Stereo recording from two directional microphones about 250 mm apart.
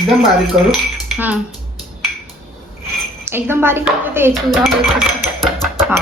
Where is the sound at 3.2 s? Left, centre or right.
Centre.